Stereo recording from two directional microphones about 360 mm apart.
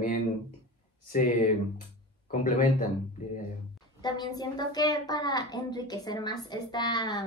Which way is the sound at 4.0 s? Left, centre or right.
Centre.